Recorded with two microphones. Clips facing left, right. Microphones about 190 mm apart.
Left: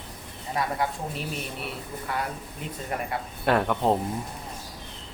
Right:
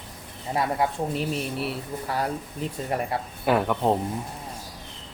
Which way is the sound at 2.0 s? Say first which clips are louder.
Right 3 dB; 35° right (ahead or behind).